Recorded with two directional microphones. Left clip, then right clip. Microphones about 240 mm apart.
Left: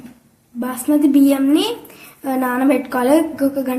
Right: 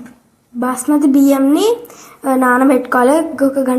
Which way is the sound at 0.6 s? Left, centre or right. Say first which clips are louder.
Right 3 dB; centre.